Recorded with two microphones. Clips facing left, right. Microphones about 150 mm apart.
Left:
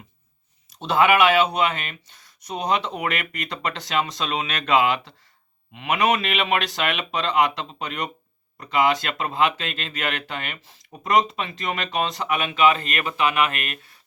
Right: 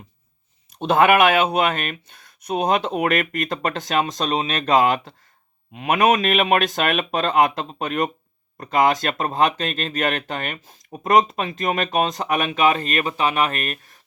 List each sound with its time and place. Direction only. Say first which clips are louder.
0.7 s speech: right 3 dB; 50° right (ahead or behind)